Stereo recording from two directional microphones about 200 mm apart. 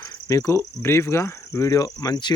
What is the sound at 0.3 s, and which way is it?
Speech, 15° left (ahead or behind).